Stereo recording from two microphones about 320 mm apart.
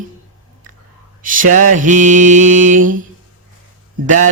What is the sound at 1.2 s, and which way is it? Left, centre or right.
Mantra, right.